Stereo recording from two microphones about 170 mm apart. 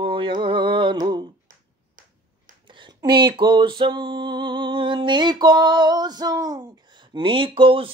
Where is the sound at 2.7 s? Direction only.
25° right (ahead or behind).